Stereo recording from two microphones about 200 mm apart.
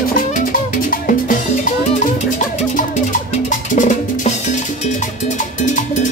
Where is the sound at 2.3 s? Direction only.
40° left (ahead or behind).